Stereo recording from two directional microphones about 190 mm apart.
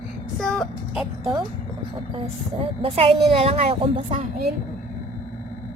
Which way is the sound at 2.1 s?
30° right (ahead or behind).